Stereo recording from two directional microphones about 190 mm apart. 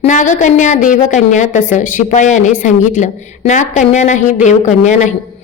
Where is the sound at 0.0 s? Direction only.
40° left (ahead or behind).